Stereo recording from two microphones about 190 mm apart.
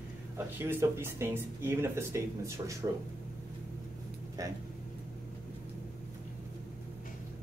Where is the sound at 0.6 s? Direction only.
10° right (ahead or behind).